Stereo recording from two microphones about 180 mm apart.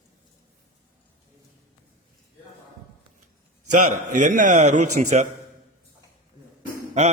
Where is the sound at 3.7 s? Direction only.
45° right (ahead or behind).